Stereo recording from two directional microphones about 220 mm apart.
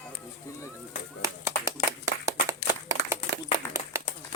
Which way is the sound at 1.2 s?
15° right (ahead or behind).